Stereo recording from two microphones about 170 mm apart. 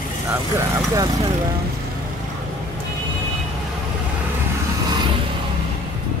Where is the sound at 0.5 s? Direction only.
20° right (ahead or behind).